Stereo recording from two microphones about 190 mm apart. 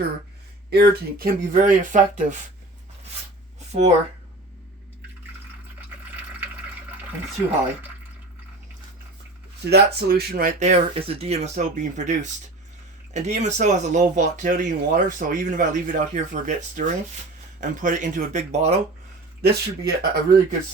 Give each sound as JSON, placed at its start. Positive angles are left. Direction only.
{"t": 0.7, "sound": "speech", "side_deg": -55}
{"t": 3.7, "sound": "speech", "side_deg": -35}
{"t": 9.6, "sound": "speech", "side_deg": -55}
{"t": 19.4, "sound": "speech", "side_deg": -55}